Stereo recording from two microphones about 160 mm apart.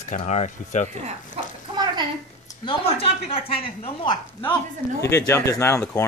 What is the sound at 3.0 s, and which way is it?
A woman's voice, 35° left (ahead or behind).